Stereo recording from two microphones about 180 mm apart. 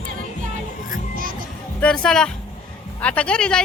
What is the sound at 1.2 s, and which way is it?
Music, 50° right (ahead or behind).